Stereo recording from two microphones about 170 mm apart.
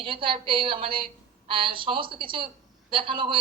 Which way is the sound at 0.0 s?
30° right (ahead or behind).